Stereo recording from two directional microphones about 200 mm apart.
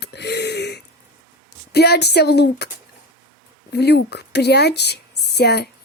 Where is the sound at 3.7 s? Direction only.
55° left (ahead or behind).